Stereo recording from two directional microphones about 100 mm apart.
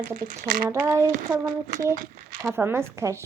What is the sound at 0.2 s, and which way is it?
Speech, 30° right (ahead or behind).